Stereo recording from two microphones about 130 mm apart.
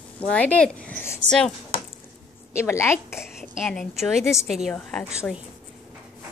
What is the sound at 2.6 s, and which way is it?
Speech, 20° left (ahead or behind).